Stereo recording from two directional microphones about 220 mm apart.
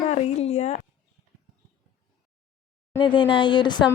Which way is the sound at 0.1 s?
30° left (ahead or behind).